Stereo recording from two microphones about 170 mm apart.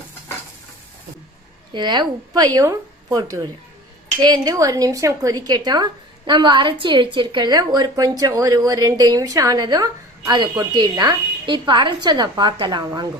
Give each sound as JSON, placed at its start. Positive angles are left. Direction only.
{"t": 1.7, "sound": "a woman's voice", "side_deg": -25}